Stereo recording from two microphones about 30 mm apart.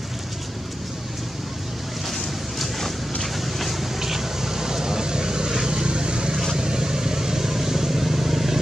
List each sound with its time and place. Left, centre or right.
2.0 s a sound: centre
3.3 s vehicle: centre
4.0 s vehicle: centre